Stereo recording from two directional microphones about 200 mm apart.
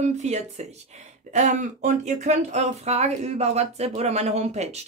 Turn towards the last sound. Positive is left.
turn(degrees=-35)  # may be behind; listen again after turning